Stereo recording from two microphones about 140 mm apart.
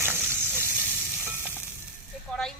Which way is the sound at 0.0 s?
15° right (ahead or behind).